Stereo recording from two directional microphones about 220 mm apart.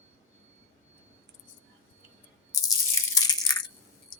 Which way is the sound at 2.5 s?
15° left (ahead or behind).